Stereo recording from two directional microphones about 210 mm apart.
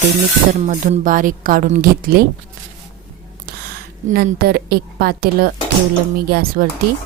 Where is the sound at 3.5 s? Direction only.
45° right (ahead or behind).